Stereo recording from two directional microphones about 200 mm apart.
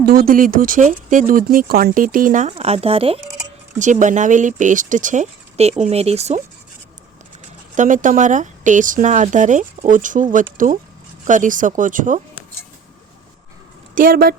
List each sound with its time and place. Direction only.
0.0 s speech: 45° right (ahead or behind)
7.8 s speech: 40° right (ahead or behind)
13.9 s speech: 45° right (ahead or behind)